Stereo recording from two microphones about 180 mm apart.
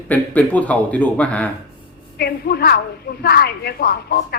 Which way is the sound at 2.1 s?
60° left (ahead or behind).